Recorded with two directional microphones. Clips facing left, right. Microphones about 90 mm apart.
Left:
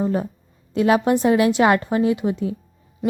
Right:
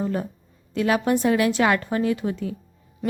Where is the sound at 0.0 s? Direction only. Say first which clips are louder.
Left 4 dB; 20° left (ahead or behind).